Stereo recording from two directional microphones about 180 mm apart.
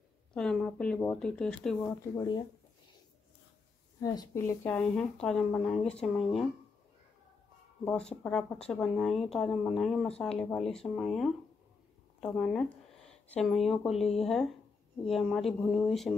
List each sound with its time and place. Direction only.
0.3 s speech: 5° left (ahead or behind)
2.1 s speech: 25° left (ahead or behind)
4.0 s a woman's voice: 20° left (ahead or behind); by 6.4 s centre (ahead or behind)
7.8 s a woman's voice: 5° left (ahead or behind)